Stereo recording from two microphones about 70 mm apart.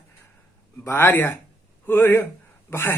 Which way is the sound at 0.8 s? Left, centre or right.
Left.